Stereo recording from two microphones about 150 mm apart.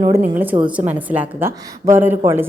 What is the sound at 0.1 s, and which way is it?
A woman's voice, 10° right (ahead or behind).